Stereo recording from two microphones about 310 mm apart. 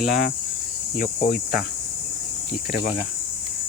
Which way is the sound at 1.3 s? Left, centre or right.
Centre.